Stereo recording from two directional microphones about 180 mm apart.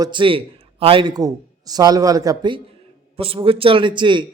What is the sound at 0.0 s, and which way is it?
A man's voice, 25° right (ahead or behind).